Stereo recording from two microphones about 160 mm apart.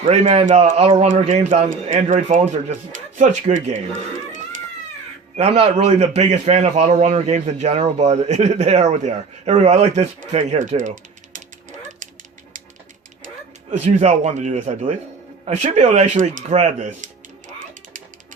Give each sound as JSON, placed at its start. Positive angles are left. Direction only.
{"t": 0.1, "sound": "a man's voice", "side_deg": -40}
{"t": 0.4, "sound": "a man's voice", "side_deg": -50}
{"t": 5.4, "sound": "a man's voice", "side_deg": -35}
{"t": 14.0, "sound": "a man's voice", "side_deg": -45}